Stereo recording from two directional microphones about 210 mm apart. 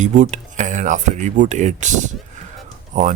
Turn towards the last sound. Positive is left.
turn(degrees=-35)  # may be behind; listen again after turning